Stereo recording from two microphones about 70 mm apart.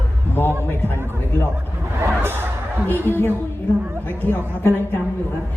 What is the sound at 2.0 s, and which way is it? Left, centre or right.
Music, right.